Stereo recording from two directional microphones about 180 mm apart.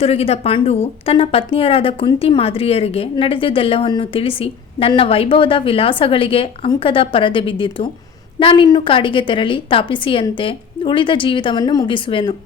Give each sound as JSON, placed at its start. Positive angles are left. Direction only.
{"t": 0.0, "sound": "a woman's voice", "side_deg": 35}